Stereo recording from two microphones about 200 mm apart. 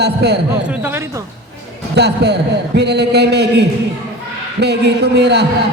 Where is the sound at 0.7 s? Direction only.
10° right (ahead or behind).